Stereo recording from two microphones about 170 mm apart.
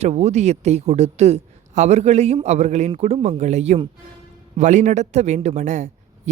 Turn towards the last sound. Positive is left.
turn(degrees=-45)  # may be behind; listen again after turning